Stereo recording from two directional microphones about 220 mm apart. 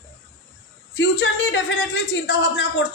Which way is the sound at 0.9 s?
50° left (ahead or behind).